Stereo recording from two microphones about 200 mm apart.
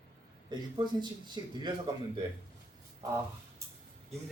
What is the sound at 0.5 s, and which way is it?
A man's voice, 20° right (ahead or behind).